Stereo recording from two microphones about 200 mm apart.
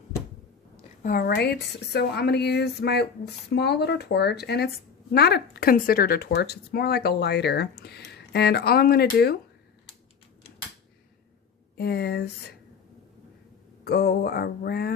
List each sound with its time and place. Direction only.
1.0 s a woman's voice: 45° left (ahead or behind)
11.8 s a woman's voice: 55° left (ahead or behind)
13.8 s speech: 55° left (ahead or behind)